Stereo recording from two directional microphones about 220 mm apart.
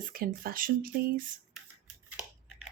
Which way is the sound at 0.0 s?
40° right (ahead or behind).